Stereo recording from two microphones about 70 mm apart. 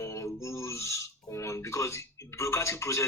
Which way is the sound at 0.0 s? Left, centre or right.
Left.